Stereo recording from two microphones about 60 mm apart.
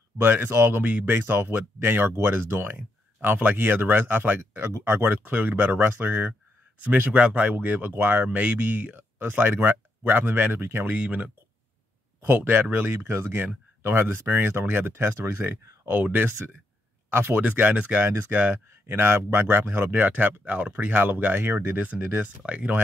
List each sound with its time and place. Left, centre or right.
0.2 s speech: right
11.0 s speech: right
12.2 s speech: right
15.6 s a sound: right
15.9 s speech: right
18.0 s speech: right
21.5 s speech: right
22.5 s speech: right